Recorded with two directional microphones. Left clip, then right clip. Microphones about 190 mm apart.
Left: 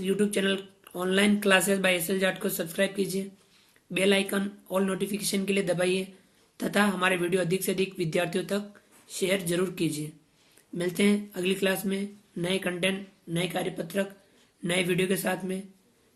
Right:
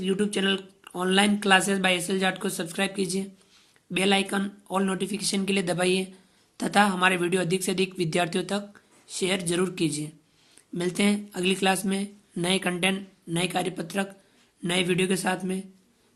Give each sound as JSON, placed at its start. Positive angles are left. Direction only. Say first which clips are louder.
{"t": 0.0, "sound": "speech", "louder": "right 1 dB", "side_deg": -25}